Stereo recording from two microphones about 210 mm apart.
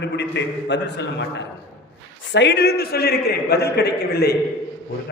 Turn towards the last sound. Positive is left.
turn(degrees=50)  # may be behind; listen again after turning